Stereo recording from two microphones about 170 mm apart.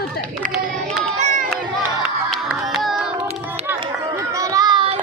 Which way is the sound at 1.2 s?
50° right (ahead or behind).